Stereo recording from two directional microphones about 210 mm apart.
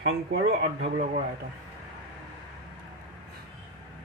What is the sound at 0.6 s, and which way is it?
Speech, 35° right (ahead or behind).